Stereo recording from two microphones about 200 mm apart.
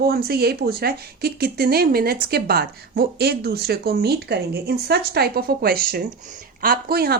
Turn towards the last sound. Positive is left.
turn(degrees=-50)  # may be behind; listen again after turning